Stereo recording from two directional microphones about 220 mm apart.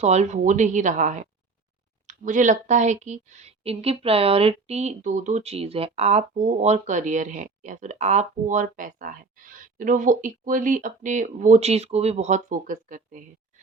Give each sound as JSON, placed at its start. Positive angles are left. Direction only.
{"t": 0.0, "sound": "a woman's voice", "side_deg": -30}